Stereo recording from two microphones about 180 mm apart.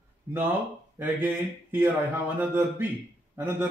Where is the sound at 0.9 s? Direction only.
10° right (ahead or behind).